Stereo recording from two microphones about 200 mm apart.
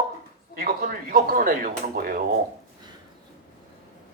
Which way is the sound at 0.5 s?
45° right (ahead or behind).